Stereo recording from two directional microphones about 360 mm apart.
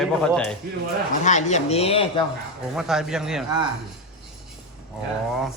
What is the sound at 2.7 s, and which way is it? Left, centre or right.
Speech, centre.